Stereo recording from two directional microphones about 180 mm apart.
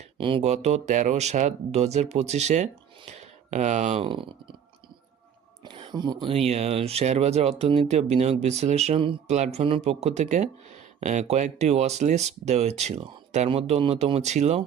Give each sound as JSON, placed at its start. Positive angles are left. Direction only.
{"t": 0.0, "sound": "speech", "side_deg": -30}
{"t": 4.1, "sound": "speech", "side_deg": -30}
{"t": 5.6, "sound": "speech", "side_deg": -30}